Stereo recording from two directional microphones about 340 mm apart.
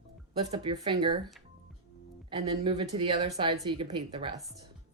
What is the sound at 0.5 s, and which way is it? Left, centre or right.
Speech, centre.